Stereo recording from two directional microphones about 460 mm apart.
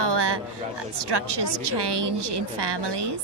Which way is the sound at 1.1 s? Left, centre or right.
Right.